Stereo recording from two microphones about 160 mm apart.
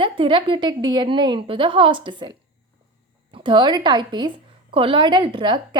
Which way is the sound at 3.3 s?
30° right (ahead or behind).